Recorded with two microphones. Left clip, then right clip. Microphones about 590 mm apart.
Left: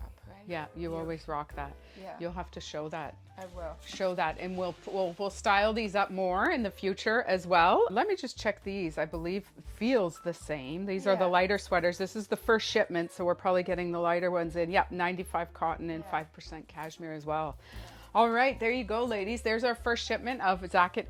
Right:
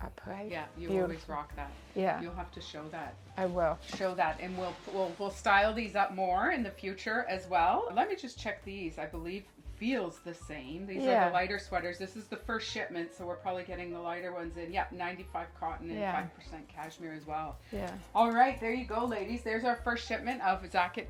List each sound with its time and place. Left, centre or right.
0.0 s a sound: right
0.5 s a woman's voice: left
3.3 s speech: right
3.9 s a woman's voice: left
16.7 s a woman's voice: left